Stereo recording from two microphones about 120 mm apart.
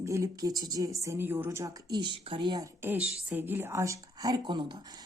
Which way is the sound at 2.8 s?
15° right (ahead or behind).